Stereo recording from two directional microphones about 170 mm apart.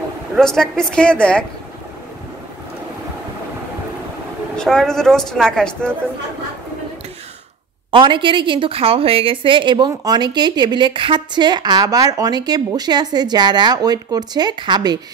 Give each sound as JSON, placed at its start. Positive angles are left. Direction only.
{"t": 0.4, "sound": "a woman's voice", "side_deg": 5}
{"t": 4.6, "sound": "a woman's voice", "side_deg": 5}
{"t": 7.9, "sound": "a woman's voice", "side_deg": -30}